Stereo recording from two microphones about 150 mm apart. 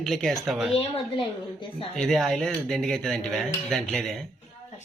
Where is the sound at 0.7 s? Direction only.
35° left (ahead or behind).